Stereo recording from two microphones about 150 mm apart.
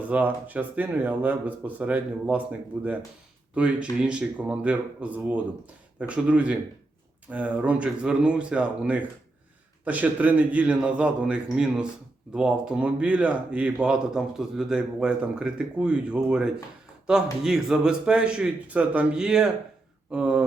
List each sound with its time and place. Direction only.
0.1 s speech: 10° right (ahead or behind)